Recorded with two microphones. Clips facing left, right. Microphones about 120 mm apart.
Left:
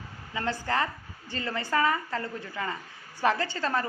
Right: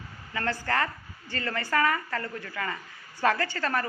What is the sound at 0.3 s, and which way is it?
A woman's voice, 15° left (ahead or behind).